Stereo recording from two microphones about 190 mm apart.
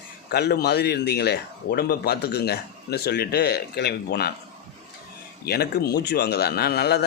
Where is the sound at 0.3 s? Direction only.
55° left (ahead or behind).